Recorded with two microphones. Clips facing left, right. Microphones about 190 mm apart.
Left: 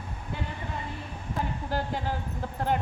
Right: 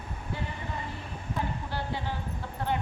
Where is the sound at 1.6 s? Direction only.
45° left (ahead or behind).